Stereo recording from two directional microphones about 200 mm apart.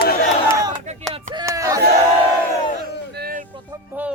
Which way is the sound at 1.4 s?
15° right (ahead or behind).